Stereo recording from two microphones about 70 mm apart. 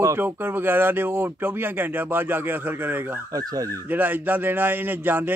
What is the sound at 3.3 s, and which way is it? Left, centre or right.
Speech, right.